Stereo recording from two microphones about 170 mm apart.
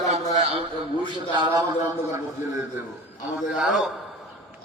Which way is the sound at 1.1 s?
25° right (ahead or behind).